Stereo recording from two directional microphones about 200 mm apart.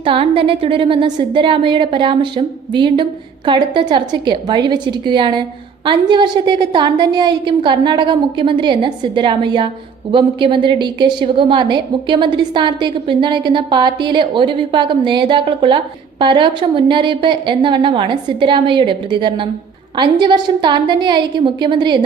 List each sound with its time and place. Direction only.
0.0 s a woman's voice: 25° right (ahead or behind)